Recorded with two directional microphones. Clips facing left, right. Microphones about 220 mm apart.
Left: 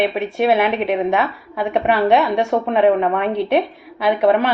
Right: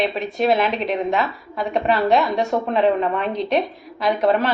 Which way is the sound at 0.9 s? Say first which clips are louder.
Left 3 dB; 60° left (ahead or behind).